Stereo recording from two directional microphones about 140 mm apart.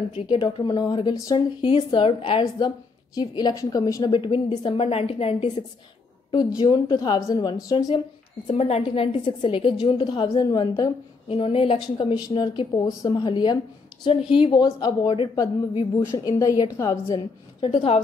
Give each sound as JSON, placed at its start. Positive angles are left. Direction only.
{"t": 0.3, "sound": "a woman's voice", "side_deg": 35}
{"t": 4.2, "sound": "a woman's voice", "side_deg": 40}
{"t": 6.6, "sound": "a woman's voice", "side_deg": 30}
{"t": 8.5, "sound": "a woman's voice", "side_deg": 50}
{"t": 11.2, "sound": "a woman's voice", "side_deg": 45}
{"t": 17.6, "sound": "a woman's voice", "side_deg": 40}